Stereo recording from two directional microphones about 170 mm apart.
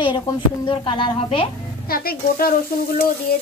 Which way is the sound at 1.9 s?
60° left (ahead or behind).